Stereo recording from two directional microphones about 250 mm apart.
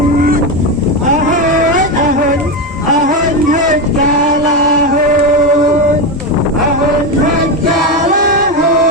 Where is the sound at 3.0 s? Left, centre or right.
Right.